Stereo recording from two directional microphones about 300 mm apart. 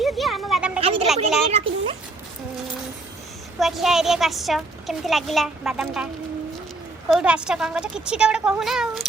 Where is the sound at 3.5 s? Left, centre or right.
Centre.